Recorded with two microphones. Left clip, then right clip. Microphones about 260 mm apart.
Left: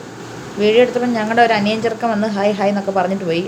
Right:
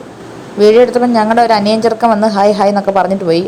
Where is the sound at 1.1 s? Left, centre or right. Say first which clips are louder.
Right 5 dB; centre.